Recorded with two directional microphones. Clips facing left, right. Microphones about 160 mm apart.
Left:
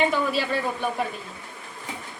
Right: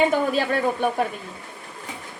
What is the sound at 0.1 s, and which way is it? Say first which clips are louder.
Speech: right 3 dB; 50° right (ahead or behind).